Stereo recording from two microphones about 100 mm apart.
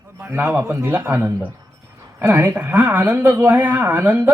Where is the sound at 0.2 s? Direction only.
20° right (ahead or behind).